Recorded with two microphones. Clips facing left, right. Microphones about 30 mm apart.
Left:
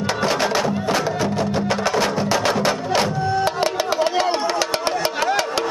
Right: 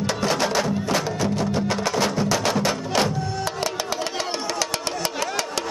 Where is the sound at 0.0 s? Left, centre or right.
Centre.